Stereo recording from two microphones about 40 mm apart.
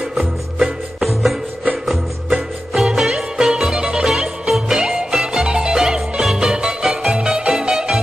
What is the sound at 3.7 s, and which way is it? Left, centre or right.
Music, right.